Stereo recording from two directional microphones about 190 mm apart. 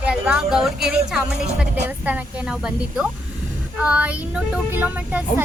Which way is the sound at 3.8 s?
5° right (ahead or behind).